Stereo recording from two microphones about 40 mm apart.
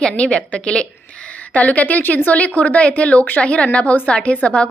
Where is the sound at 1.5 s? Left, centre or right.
Left.